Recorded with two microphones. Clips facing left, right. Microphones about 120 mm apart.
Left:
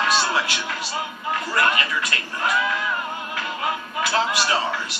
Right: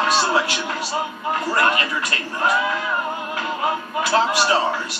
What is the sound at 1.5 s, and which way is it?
A man's voice, 40° right (ahead or behind).